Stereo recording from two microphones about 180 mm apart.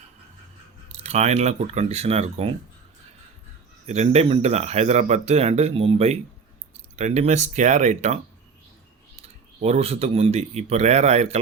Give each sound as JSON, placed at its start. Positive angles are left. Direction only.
{"t": 0.9, "sound": "speech", "side_deg": -40}
{"t": 3.8, "sound": "speech", "side_deg": -35}
{"t": 9.2, "sound": "speech", "side_deg": -35}